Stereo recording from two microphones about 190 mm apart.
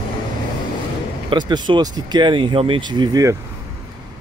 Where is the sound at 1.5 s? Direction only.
20° right (ahead or behind).